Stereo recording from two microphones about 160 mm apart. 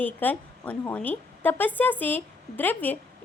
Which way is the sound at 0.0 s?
10° left (ahead or behind).